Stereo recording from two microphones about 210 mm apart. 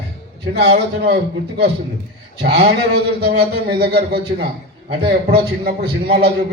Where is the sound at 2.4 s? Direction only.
50° right (ahead or behind).